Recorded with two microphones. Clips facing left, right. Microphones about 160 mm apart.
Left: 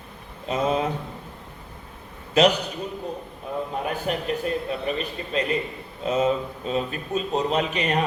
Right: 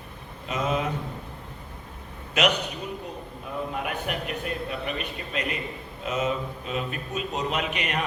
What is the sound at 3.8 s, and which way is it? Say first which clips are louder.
A man's voice: left 4 dB; 30° left (ahead or behind).